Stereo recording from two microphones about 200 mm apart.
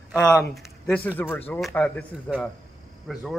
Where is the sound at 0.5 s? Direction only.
5° left (ahead or behind).